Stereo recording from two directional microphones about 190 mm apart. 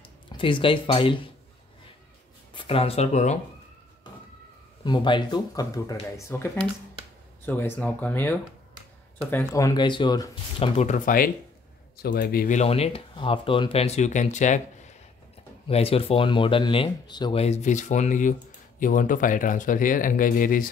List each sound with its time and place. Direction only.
0.3 s speech: 25° left (ahead or behind)
2.5 s speech: 30° left (ahead or behind)
4.8 s speech: 25° left (ahead or behind)
10.8 s speech: 45° left (ahead or behind)
12.0 s speech: 55° left (ahead or behind)